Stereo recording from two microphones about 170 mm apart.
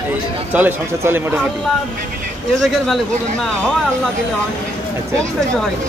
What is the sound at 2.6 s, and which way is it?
Speech, centre (ahead or behind).